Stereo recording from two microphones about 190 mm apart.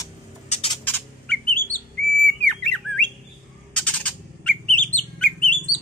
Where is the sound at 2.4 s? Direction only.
5° left (ahead or behind).